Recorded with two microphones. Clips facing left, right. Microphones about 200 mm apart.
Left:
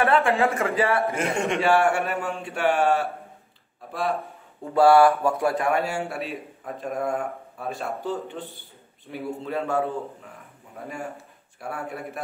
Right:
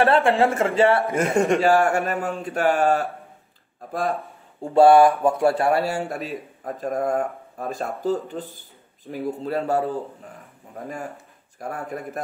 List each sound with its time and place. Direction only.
0.0 s a man's voice: 30° right (ahead or behind)
1.1 s a man's voice: 45° right (ahead or behind)
4.7 s a man's voice: 20° right (ahead or behind); by 12.2 s 40° right (ahead or behind)